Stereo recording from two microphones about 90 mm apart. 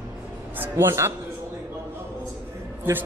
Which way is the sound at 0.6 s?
25° right (ahead or behind).